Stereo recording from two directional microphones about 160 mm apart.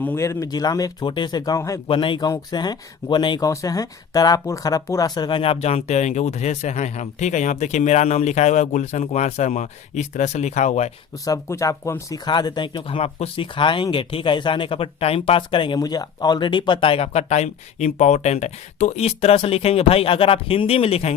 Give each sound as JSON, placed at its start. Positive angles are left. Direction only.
{"t": 0.0, "sound": "speech", "side_deg": 15}
{"t": 11.3, "sound": "speech", "side_deg": 20}